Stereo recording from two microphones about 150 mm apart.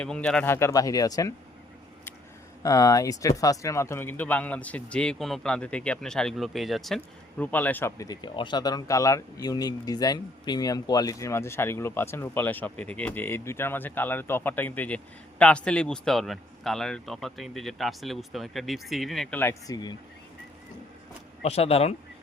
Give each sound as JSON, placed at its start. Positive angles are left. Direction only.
{"t": 0.0, "sound": "speech", "side_deg": 5}
{"t": 0.5, "sound": "speech", "side_deg": 20}
{"t": 2.6, "sound": "speech", "side_deg": 20}
{"t": 19.4, "sound": "speech", "side_deg": 15}
{"t": 19.7, "sound": "speech", "side_deg": 30}
{"t": 21.4, "sound": "speech", "side_deg": 45}